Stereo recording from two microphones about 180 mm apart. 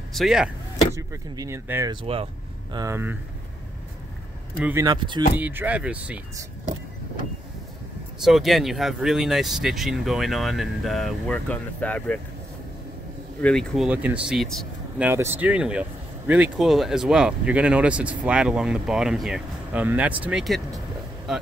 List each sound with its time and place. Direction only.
0.1 s speech: centre (ahead or behind)
0.9 s speech: 20° right (ahead or behind)
4.8 s speech: 25° right (ahead or behind)
5.4 s speech: 10° right (ahead or behind)
8.2 s speech: centre (ahead or behind)
13.4 s speech: 5° left (ahead or behind)
15.0 s speech: 10° right (ahead or behind)